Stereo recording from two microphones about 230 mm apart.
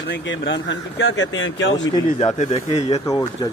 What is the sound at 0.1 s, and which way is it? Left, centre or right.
Speech, left.